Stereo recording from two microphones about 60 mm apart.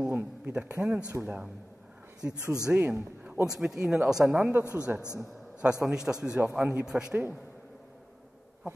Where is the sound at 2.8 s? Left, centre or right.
Right.